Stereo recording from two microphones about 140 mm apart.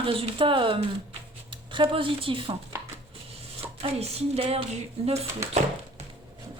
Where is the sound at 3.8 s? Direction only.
45° right (ahead or behind).